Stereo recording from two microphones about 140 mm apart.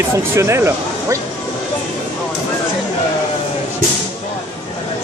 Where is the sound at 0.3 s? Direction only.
20° right (ahead or behind).